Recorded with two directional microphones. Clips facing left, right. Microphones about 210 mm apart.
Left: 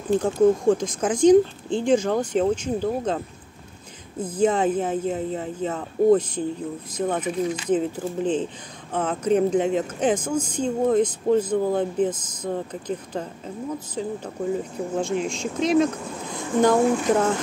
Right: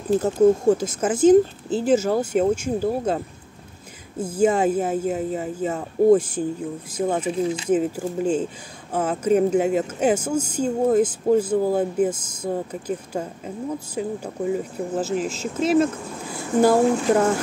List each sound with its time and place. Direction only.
0.1 s speech: 5° right (ahead or behind)
4.2 s speech: 10° right (ahead or behind)
7.2 s speech: 25° right (ahead or behind)
7.7 s speech: 10° right (ahead or behind)